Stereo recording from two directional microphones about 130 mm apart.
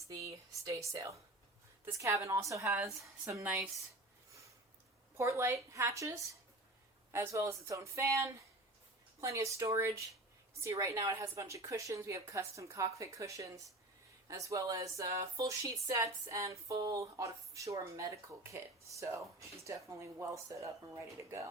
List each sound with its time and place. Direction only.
0.1 s speech: 25° right (ahead or behind)
5.1 s speech: 20° right (ahead or behind)